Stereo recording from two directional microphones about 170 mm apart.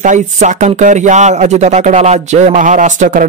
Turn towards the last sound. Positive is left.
turn(degrees=-45)  # may be behind; listen again after turning